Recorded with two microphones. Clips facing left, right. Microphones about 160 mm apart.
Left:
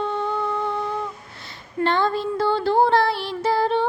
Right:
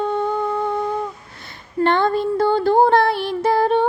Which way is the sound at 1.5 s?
55° right (ahead or behind).